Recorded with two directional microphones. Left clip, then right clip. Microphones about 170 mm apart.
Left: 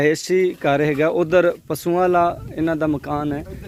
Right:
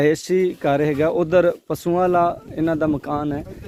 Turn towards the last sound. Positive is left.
turn(degrees=-25)  # may be behind; listen again after turning